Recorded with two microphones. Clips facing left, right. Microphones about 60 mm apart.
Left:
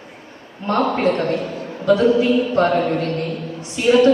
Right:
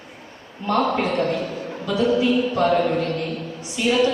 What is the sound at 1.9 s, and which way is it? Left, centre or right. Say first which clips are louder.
Music: left 8 dB; left.